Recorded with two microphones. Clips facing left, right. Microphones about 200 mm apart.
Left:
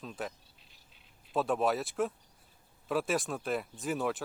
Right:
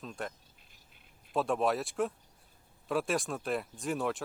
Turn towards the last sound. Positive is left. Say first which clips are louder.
# even
turn(degrees=0)  # may be behind; listen again after turning